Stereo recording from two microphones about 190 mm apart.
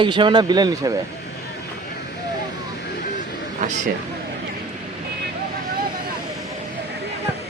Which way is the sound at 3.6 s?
40° right (ahead or behind).